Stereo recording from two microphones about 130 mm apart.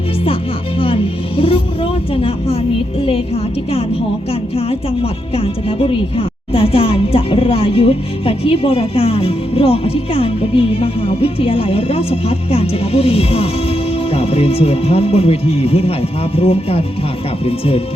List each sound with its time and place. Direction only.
0.8 s music: 45° left (ahead or behind)
5.4 s a woman's voice: 45° left (ahead or behind)